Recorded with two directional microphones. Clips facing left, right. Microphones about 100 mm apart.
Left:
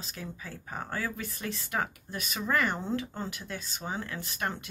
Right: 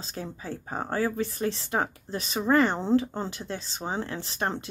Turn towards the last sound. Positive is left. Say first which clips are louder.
# right 4 dB
turn(degrees=-30)  # may be behind; listen again after turning